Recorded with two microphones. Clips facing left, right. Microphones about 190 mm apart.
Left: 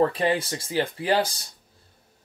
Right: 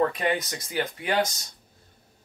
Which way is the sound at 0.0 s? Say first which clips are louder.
Left 3 dB; 30° left (ahead or behind).